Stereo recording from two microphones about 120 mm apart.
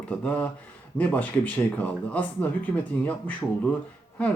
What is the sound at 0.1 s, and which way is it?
Speech, 10° left (ahead or behind).